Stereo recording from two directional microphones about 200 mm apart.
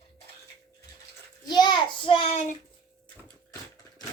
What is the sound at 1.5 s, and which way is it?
Child singing, 20° left (ahead or behind).